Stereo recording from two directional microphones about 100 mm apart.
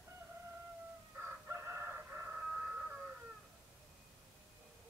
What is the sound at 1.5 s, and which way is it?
Chicken, 25° right (ahead or behind).